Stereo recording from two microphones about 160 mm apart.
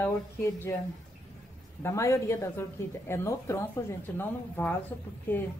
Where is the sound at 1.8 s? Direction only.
20° left (ahead or behind).